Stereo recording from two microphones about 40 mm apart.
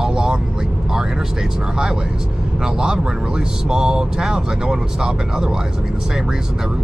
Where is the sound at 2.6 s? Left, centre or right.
Centre.